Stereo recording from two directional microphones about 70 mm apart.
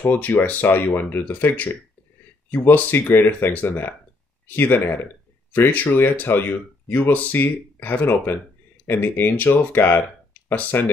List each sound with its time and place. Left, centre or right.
0.0 s speech: left